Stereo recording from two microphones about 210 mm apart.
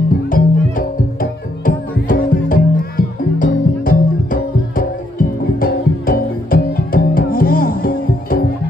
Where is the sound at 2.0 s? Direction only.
40° left (ahead or behind).